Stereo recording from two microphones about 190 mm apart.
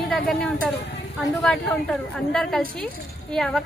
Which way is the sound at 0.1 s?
Centre (ahead or behind).